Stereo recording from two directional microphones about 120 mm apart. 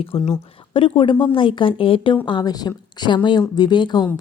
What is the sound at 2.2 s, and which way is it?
Speech, 35° left (ahead or behind).